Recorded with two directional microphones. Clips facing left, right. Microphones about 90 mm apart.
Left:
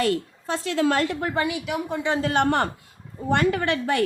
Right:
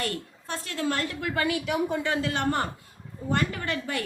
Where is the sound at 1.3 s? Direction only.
20° left (ahead or behind).